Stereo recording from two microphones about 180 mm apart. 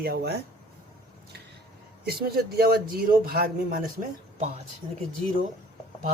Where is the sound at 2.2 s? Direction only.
60° right (ahead or behind).